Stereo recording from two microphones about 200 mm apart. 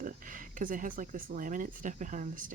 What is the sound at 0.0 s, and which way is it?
Speech, 40° right (ahead or behind).